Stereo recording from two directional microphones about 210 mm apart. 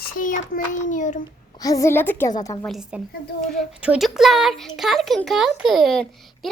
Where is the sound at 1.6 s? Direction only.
15° left (ahead or behind).